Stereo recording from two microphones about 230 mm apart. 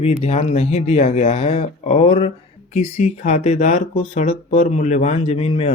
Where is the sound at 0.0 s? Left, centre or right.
Left.